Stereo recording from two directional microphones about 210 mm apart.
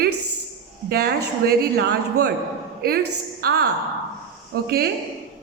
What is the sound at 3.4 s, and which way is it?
Speech, 50° right (ahead or behind).